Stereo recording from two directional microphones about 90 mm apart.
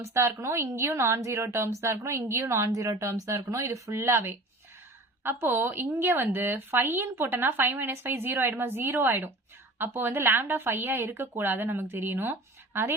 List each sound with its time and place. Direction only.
0.0 s a woman's voice: 30° right (ahead or behind)